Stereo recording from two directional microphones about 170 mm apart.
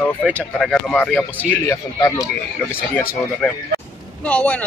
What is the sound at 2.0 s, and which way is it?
Speech, 20° left (ahead or behind).